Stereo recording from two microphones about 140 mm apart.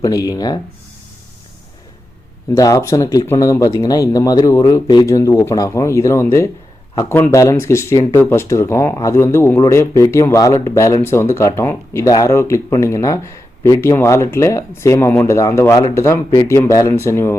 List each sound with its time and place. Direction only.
0.0 s speech: 25° left (ahead or behind)
2.5 s speech: 25° left (ahead or behind)